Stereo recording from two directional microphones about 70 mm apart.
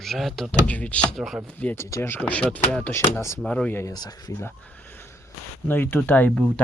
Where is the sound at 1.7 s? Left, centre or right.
Left.